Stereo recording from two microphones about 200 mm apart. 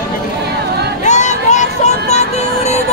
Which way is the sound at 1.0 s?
35° left (ahead or behind).